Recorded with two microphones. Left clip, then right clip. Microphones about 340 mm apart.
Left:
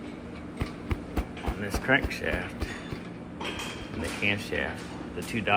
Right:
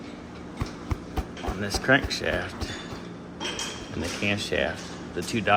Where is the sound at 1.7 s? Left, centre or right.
Right.